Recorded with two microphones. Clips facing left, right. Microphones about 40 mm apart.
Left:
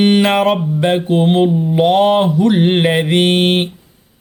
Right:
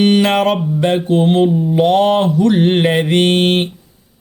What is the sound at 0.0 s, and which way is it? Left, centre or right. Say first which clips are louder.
Speech: even; centre.